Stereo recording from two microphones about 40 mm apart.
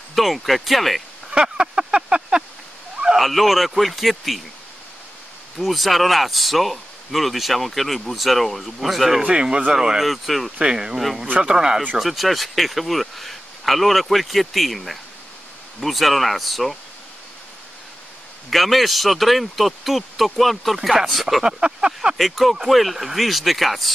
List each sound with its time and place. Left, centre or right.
0.1 s speech: centre
1.3 s a sound: right
3.2 s speech: centre
5.6 s speech: centre
9.2 s speech: right
10.0 s speech: centre
10.6 s speech: centre
12.0 s speech: centre
18.5 s speech: centre
21.4 s speech: centre
22.1 s speech: centre